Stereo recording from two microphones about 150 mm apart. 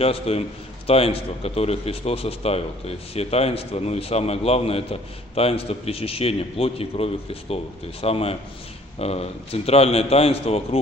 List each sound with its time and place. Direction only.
0.0 s a man's voice: 40° left (ahead or behind)